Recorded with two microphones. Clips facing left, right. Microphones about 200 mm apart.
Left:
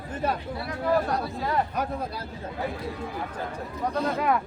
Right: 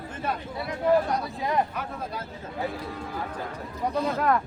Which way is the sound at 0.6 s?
20° right (ahead or behind).